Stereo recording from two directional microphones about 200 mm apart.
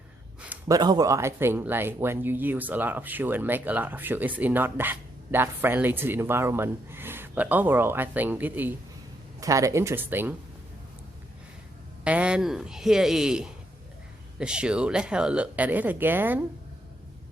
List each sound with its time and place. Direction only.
0.4 s a sound: 10° right (ahead or behind)
0.8 s speech: 20° right (ahead or behind)
12.0 s speech: 5° right (ahead or behind)